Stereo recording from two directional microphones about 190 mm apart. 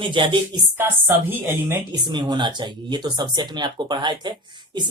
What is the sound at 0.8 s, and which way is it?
Speech, 10° right (ahead or behind).